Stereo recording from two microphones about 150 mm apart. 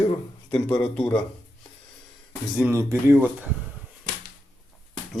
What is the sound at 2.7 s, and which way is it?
Speech, 20° right (ahead or behind).